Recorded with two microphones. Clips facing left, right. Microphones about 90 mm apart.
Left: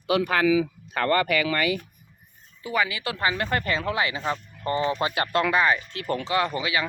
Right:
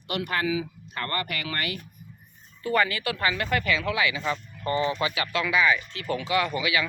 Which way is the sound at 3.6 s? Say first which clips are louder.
Even; 40° left (ahead or behind).